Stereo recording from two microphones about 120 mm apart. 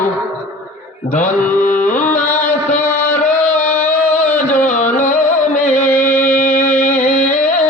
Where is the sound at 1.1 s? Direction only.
90° left.